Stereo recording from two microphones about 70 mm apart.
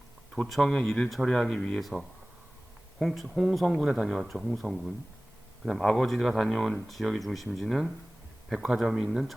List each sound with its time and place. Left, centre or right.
0.4 s speech: centre
3.0 s speech: centre
3.2 s speech: centre